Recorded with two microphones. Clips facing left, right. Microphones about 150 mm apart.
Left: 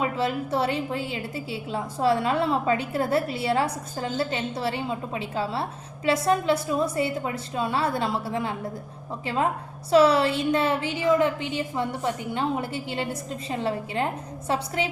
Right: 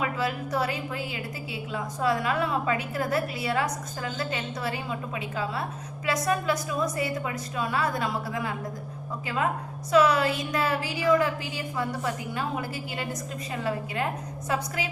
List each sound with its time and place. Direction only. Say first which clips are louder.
0.0 s a woman's voice: left 3 dB; 25° left (ahead or behind)